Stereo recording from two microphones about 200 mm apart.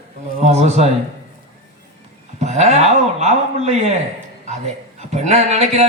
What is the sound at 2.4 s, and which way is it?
A man's voice, 35° right (ahead or behind).